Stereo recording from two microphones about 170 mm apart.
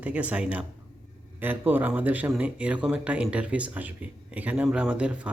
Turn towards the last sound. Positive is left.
turn(degrees=-10)  # may be behind; listen again after turning